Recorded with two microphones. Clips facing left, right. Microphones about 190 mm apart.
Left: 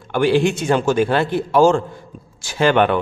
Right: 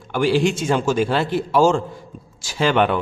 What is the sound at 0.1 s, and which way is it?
Speech, 55° left (ahead or behind).